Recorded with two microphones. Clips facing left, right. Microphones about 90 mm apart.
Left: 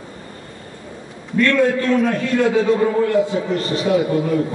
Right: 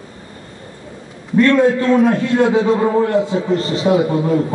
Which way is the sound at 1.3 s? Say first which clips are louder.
Right 4 dB; 30° right (ahead or behind).